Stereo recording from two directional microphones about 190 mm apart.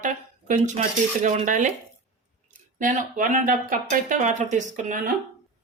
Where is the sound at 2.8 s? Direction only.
45° right (ahead or behind).